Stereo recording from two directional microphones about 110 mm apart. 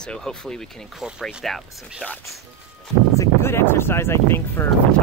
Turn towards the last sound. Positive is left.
turn(degrees=20)  # may be behind; listen again after turning